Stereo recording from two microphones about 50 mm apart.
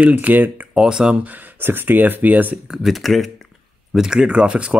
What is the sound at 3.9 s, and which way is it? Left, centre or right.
Speech, centre.